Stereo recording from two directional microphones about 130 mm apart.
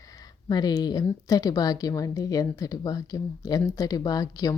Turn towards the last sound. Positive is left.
turn(degrees=30)  # may be behind; listen again after turning